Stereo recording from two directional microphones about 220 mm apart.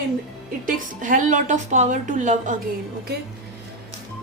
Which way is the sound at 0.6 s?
35° right (ahead or behind).